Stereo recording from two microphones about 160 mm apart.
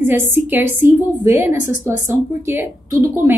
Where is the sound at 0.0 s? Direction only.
15° right (ahead or behind).